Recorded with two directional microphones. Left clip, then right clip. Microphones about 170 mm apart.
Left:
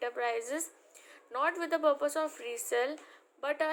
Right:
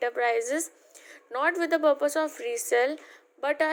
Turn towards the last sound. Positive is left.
turn(degrees=-35)  # may be behind; listen again after turning